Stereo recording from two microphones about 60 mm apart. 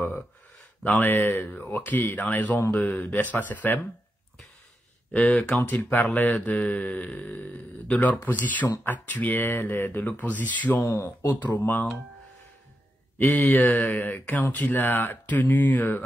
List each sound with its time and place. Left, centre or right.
0.8 s a man's voice: left
5.7 s a man's voice: left
10.8 s speech: left
11.2 s speech: left
13.2 s a man's voice: left